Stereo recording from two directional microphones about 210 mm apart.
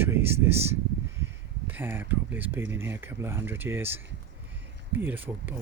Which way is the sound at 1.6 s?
10° right (ahead or behind).